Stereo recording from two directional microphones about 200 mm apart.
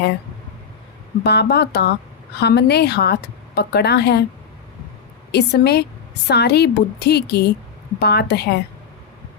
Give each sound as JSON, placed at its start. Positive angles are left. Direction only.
{"t": 1.2, "sound": "a woman's voice", "side_deg": 55}
{"t": 5.3, "sound": "a woman's voice", "side_deg": 55}